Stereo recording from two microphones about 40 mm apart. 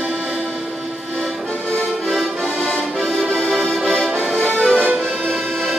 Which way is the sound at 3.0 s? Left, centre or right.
Centre.